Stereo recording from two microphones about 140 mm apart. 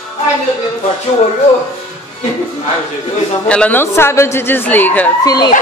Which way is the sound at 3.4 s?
10° left (ahead or behind).